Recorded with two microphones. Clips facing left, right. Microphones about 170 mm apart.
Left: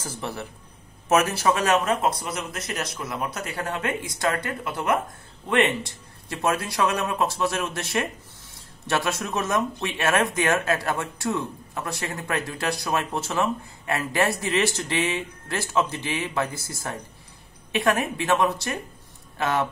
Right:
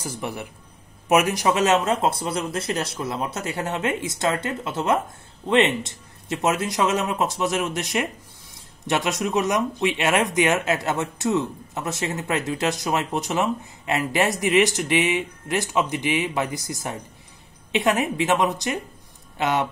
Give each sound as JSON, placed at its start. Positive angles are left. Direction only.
{"t": 0.0, "sound": "a man's voice", "side_deg": -10}